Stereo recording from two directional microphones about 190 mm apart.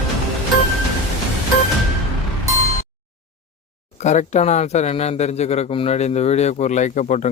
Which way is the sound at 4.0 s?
35° left (ahead or behind).